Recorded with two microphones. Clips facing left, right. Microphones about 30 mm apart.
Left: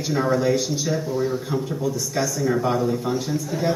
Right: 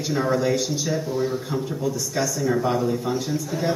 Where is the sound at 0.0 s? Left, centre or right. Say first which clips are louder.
Left 1 dB; centre.